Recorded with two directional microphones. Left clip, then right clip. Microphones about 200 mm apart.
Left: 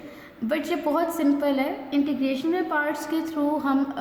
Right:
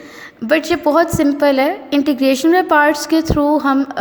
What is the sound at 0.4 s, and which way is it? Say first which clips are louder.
A woman's voice: right 11 dB; 40° right (ahead or behind).